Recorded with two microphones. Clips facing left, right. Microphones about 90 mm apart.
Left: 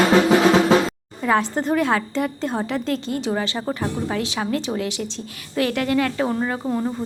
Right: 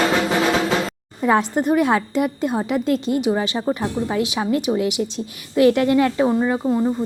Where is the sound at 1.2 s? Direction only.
20° right (ahead or behind).